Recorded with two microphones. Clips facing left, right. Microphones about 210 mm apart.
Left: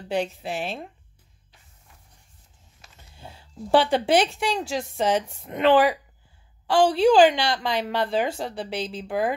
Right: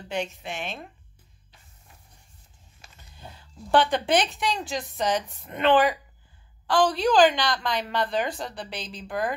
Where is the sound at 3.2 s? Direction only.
30° left (ahead or behind).